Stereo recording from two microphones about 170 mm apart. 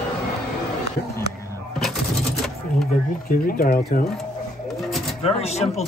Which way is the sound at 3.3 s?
55° left (ahead or behind).